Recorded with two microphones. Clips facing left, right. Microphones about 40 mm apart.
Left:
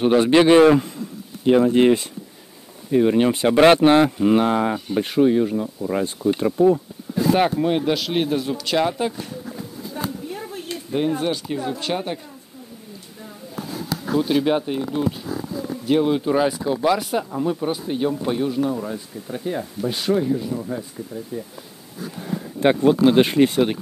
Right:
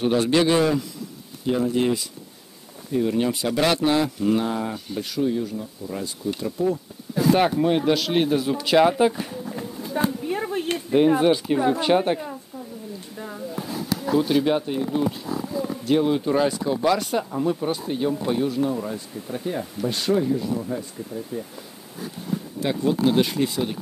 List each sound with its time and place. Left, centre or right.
0.0 s speech: left
4.7 s speech: left
5.1 s speech: left
7.2 s speech: centre
9.6 s a sound: right
11.1 s speech: centre
14.2 s speech: centre
22.6 s speech: left